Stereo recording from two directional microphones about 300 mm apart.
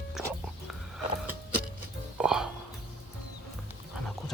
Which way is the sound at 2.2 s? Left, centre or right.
Centre.